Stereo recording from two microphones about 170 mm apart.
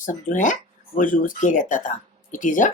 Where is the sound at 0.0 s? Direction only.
50° left (ahead or behind).